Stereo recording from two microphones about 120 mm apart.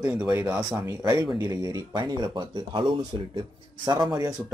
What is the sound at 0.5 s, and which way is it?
Speech, 20° right (ahead or behind).